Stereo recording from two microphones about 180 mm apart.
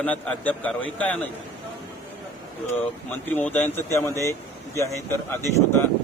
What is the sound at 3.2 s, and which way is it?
A man's voice, 10° left (ahead or behind).